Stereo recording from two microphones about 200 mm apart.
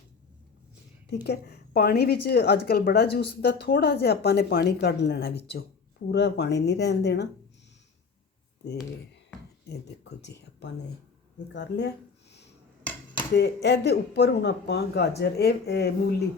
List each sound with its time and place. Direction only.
1.1 s a woman's voice: 55° left (ahead or behind)
9.6 s a woman's voice: 60° left (ahead or behind)
13.3 s a woman's voice: 60° left (ahead or behind)